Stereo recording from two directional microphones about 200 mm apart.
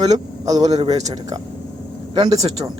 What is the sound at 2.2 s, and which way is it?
Speech, 30° right (ahead or behind).